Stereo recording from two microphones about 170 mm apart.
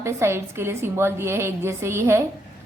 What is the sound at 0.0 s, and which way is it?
A woman's voice, 15° right (ahead or behind).